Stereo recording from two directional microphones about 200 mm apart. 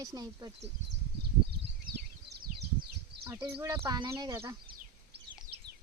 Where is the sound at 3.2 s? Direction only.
15° right (ahead or behind).